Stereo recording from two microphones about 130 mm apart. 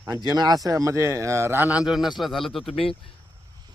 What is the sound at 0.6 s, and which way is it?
Speech, 25° right (ahead or behind).